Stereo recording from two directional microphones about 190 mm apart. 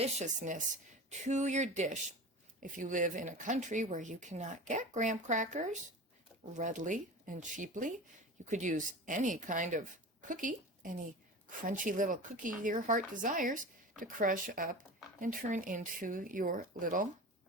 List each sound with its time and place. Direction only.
0.0 s speech: 40° right (ahead or behind)